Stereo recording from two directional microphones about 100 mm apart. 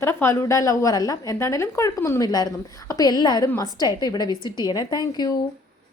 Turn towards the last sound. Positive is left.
turn(degrees=45)  # may be behind; listen again after turning